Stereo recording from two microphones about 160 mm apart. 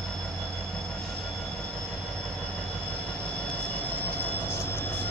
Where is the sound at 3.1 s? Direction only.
5° left (ahead or behind).